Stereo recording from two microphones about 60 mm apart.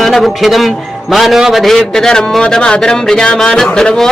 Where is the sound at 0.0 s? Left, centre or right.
Centre.